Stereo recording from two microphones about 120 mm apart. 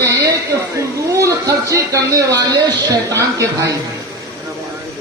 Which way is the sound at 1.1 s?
25° right (ahead or behind).